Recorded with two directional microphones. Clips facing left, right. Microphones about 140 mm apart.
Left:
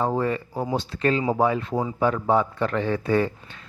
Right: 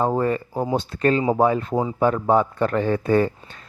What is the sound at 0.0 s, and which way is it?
Speech, 45° right (ahead or behind).